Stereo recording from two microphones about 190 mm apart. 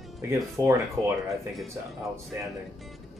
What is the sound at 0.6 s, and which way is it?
Speech, 15° right (ahead or behind).